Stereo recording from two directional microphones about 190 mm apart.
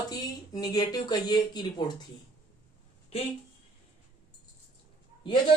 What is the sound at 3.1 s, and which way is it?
Speech, 30° left (ahead or behind).